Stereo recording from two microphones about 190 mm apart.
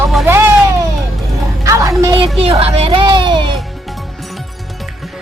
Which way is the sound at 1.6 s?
15° right (ahead or behind).